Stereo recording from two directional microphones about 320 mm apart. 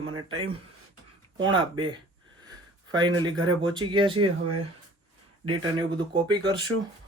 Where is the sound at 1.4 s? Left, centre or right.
Centre.